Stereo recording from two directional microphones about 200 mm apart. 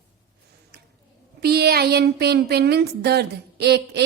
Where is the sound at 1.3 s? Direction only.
50° right (ahead or behind).